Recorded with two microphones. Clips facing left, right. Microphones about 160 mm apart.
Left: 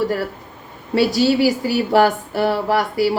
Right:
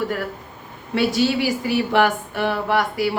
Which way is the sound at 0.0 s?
35° left (ahead or behind).